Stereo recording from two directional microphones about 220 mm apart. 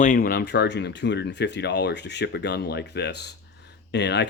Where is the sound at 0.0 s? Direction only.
40° left (ahead or behind).